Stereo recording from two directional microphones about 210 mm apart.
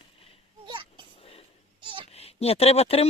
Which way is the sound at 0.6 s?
20° right (ahead or behind).